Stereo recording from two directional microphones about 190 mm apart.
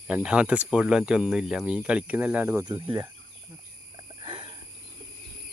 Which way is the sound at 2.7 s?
25° right (ahead or behind).